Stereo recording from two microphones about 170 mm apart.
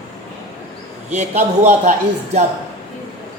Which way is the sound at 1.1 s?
40° right (ahead or behind).